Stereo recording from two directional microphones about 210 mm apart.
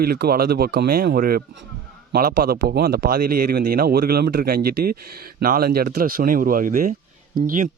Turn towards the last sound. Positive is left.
turn(degrees=-40)  # may be behind; listen again after turning